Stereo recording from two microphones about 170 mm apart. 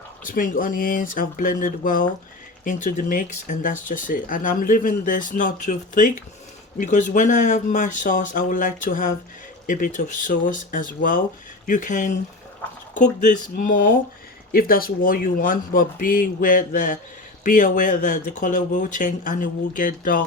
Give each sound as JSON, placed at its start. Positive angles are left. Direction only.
{"t": 0.3, "sound": "speech", "side_deg": 55}